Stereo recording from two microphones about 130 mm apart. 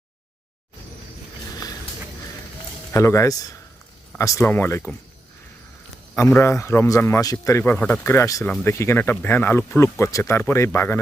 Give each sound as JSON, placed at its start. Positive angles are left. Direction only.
{"t": 2.9, "sound": "speech", "side_deg": 25}
{"t": 6.1, "sound": "speech", "side_deg": 15}
{"t": 7.6, "sound": "speech", "side_deg": 15}